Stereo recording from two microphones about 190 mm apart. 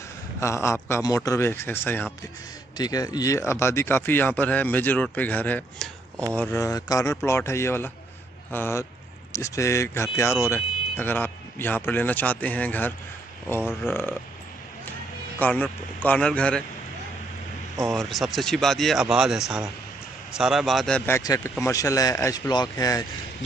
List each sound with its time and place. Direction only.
0.4 s speech: 15° left (ahead or behind)
15.3 s speech: 10° left (ahead or behind)
17.9 s speech: centre (ahead or behind); by 23.0 s 20° left (ahead or behind)